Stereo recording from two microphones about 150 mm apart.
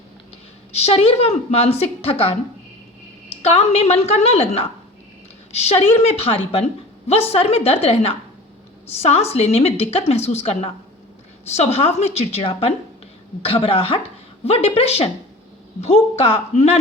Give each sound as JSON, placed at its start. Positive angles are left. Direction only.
{"t": 0.8, "sound": "a woman's voice", "side_deg": 45}
{"t": 3.4, "sound": "a woman's voice", "side_deg": 45}